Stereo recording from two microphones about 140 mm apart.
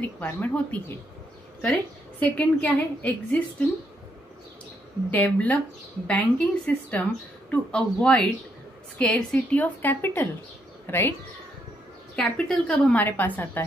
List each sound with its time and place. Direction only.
0.0 s a woman's voice: 10° left (ahead or behind)
5.1 s a woman's voice: 10° left (ahead or behind)
12.2 s a woman's voice: 5° left (ahead or behind)